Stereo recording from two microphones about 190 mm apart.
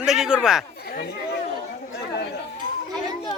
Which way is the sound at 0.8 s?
55° left (ahead or behind).